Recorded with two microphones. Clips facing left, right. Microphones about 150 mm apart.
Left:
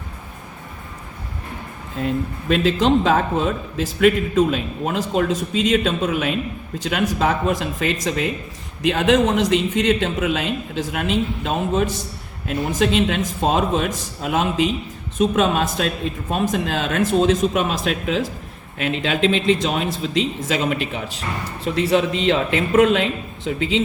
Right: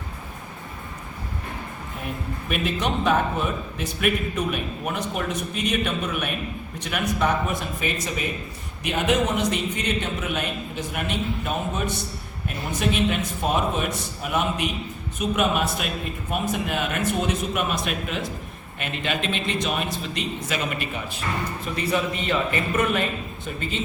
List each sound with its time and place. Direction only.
2.0 s a man's voice: 90° left